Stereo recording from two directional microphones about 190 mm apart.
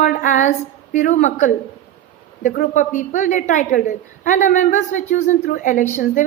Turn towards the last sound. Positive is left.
turn(degrees=45)  # may be behind; listen again after turning